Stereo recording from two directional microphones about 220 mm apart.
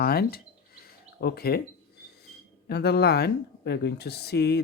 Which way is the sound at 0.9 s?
45° left (ahead or behind).